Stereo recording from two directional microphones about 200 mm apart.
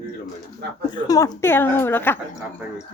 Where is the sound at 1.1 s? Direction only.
15° left (ahead or behind).